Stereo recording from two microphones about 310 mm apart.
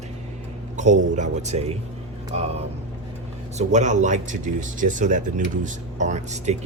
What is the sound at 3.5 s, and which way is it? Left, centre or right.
Speech, right.